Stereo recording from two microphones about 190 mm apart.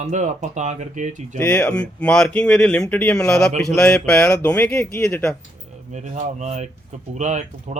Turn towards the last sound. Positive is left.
turn(degrees=-40)  # may be behind; listen again after turning